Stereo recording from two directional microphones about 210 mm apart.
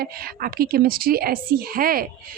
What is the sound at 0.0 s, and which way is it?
A woman's voice, 45° right (ahead or behind).